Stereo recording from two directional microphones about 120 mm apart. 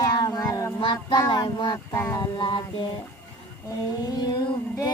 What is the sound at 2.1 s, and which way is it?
Child singing, 40° left (ahead or behind).